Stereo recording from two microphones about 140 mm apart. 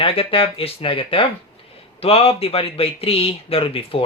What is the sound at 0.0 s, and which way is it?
Speech, 40° left (ahead or behind).